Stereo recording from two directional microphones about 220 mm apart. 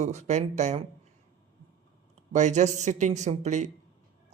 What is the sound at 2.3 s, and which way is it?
Speech, 35° right (ahead or behind).